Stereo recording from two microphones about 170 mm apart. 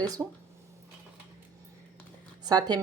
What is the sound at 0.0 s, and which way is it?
Speech, 20° right (ahead or behind).